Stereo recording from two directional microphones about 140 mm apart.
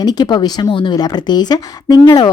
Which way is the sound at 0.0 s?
30° left (ahead or behind).